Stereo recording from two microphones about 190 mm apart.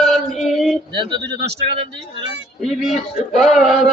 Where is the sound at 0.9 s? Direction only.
25° right (ahead or behind).